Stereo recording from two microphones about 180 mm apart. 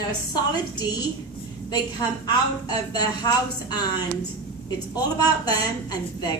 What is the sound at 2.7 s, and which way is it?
A woman's voice, 20° left (ahead or behind).